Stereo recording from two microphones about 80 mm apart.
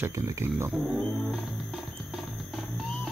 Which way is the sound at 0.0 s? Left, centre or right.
Right.